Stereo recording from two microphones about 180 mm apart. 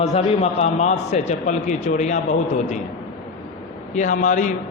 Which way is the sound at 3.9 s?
45° left (ahead or behind).